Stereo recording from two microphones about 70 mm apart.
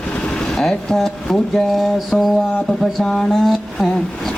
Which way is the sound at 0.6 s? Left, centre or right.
Centre.